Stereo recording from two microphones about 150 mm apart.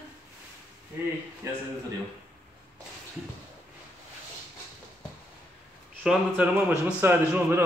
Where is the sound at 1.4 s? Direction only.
20° right (ahead or behind).